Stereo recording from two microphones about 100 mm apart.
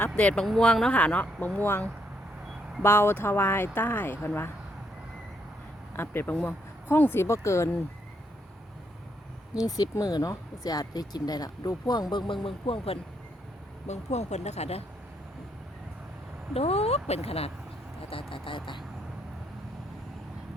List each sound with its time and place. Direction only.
0.2 s speech: 15° left (ahead or behind)
6.0 s speech: 20° left (ahead or behind)
9.6 s speech: 40° left (ahead or behind); by 13.0 s 70° left (ahead or behind)
13.9 s speech: 90° left
16.6 s speech: 90° left
18.1 s speech: 65° left (ahead or behind)